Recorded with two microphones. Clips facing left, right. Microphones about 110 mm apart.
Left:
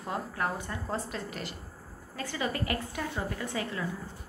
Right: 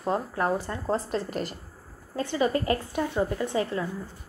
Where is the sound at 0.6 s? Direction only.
35° right (ahead or behind).